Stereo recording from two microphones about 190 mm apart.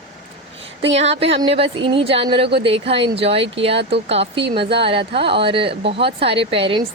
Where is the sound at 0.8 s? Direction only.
35° right (ahead or behind).